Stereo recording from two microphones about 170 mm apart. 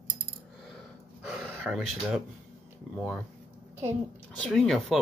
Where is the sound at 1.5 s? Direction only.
5° right (ahead or behind).